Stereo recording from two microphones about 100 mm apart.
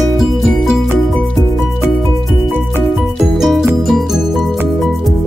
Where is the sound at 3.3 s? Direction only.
5° right (ahead or behind).